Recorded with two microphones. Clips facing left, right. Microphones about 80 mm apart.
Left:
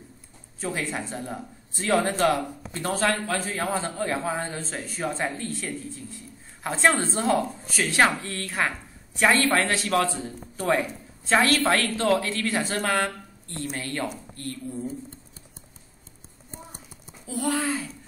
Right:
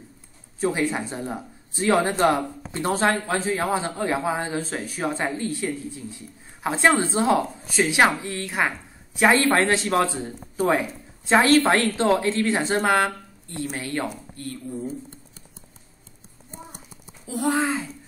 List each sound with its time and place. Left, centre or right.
0.6 s a man's voice: centre
17.3 s speech: right